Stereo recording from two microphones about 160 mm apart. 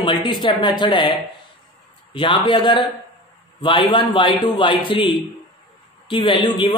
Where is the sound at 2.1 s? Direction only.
30° left (ahead or behind).